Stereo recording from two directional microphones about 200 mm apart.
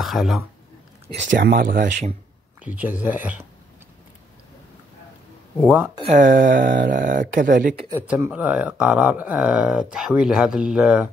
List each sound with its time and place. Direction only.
0.0 s speech: centre (ahead or behind)
1.0 s speech: 35° right (ahead or behind)
1.4 s speech: 55° right (ahead or behind); by 2.1 s 40° right (ahead or behind)
2.6 s speech: 5° right (ahead or behind)
6.1 s speech: 45° right (ahead or behind)
7.9 s speech: 10° right (ahead or behind)